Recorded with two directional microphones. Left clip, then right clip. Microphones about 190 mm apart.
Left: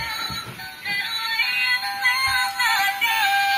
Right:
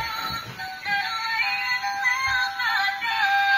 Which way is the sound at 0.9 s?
10° left (ahead or behind).